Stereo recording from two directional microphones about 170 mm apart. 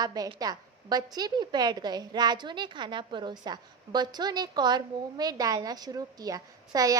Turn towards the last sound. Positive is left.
turn(degrees=-20)  # may be behind; listen again after turning